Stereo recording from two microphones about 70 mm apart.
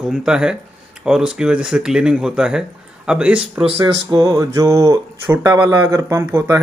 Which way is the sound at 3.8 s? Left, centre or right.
Right.